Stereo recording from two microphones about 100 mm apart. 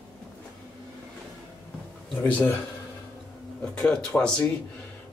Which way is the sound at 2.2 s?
20° left (ahead or behind).